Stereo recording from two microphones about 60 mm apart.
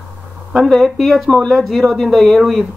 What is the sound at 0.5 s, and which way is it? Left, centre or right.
Speech, centre.